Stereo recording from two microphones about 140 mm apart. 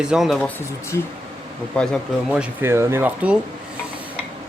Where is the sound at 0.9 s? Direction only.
20° left (ahead or behind).